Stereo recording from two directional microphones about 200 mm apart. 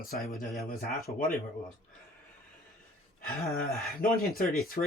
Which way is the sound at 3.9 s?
50° left (ahead or behind).